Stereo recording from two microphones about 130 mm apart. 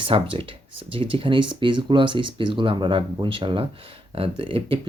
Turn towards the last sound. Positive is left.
turn(degrees=-45)  # may be behind; listen again after turning